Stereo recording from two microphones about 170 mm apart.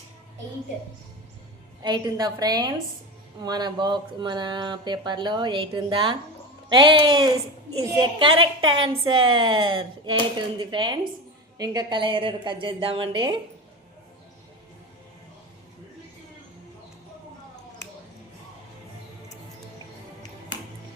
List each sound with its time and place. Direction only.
1.8 s a woman's voice: 25° right (ahead or behind)